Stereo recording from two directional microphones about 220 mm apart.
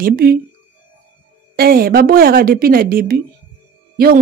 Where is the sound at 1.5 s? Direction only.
45° right (ahead or behind).